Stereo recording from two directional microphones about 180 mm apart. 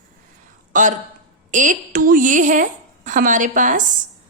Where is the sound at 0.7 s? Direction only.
45° right (ahead or behind).